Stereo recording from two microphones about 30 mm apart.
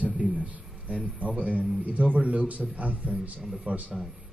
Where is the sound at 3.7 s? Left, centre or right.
Right.